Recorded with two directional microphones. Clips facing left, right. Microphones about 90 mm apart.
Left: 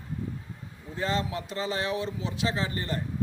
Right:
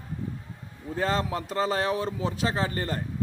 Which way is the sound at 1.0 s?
45° right (ahead or behind).